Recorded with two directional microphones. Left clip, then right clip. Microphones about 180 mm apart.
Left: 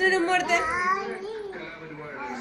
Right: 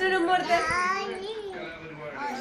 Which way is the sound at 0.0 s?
20° right (ahead or behind).